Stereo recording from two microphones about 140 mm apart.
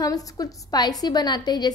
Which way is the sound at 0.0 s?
25° left (ahead or behind).